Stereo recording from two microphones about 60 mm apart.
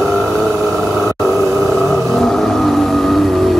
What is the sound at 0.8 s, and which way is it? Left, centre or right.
Grunt, centre.